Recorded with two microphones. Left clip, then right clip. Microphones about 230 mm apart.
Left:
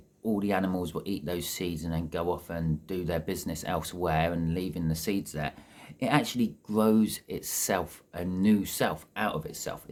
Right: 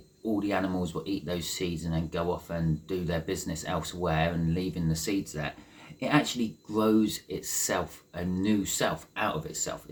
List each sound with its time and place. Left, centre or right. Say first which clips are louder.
0.4 s speech: left 2 dB; left